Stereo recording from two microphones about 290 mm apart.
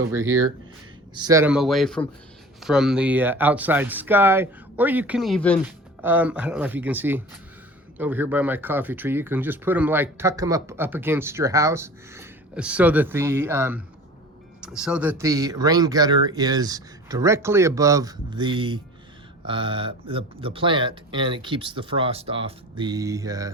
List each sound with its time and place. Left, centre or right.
0.2 s speech: right
1.1 s speech: centre